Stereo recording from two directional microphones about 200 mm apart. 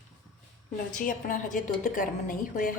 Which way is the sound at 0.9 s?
40° left (ahead or behind).